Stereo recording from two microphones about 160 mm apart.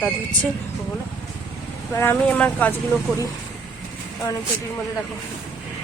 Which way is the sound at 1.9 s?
15° left (ahead or behind).